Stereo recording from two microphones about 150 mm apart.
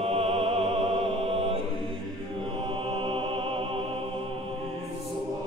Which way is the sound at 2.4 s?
35° right (ahead or behind).